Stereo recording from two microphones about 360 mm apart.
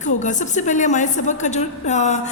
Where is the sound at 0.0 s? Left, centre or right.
Left.